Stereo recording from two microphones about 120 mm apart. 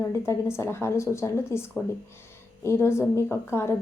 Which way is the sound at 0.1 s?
20° left (ahead or behind).